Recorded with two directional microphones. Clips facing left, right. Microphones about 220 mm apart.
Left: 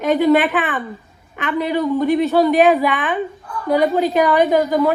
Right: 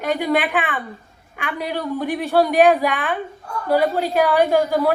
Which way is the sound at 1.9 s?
10° right (ahead or behind).